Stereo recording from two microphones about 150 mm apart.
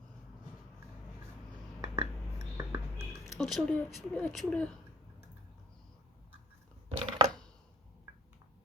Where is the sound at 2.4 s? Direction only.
20° right (ahead or behind).